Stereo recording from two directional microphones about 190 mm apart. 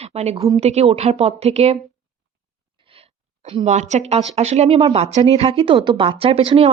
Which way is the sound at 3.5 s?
35° right (ahead or behind).